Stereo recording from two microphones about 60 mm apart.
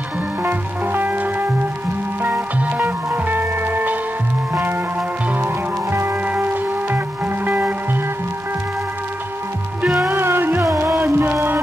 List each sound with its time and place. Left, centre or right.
0.4 s music: right
5.4 s music: right
6.2 s music: right
10.0 s music: right